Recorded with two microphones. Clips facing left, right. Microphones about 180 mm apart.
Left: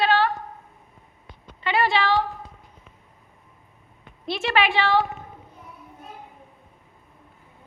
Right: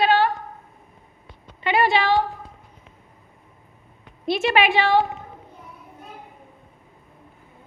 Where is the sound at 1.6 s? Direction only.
20° right (ahead or behind).